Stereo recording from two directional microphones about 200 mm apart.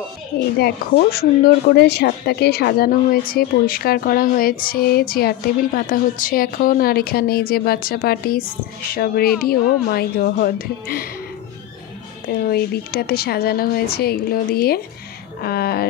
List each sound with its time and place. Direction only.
0.6 s speech: 50° left (ahead or behind)
12.4 s speech: 50° left (ahead or behind)